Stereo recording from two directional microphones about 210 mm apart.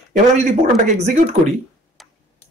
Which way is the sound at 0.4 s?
35° right (ahead or behind).